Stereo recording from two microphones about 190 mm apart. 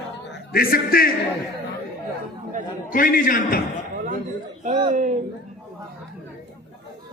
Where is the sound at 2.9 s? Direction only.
45° left (ahead or behind).